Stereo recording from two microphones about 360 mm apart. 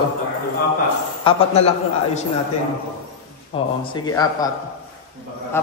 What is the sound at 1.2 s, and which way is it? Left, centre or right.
Speech, centre.